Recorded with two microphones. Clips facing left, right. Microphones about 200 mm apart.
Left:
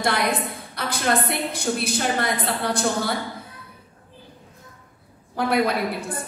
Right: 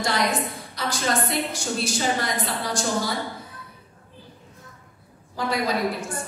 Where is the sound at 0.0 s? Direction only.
60° left (ahead or behind).